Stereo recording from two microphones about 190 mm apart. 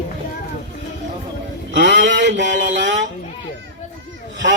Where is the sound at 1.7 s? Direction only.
70° right (ahead or behind).